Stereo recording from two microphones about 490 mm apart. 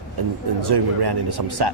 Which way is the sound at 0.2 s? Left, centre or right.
Right.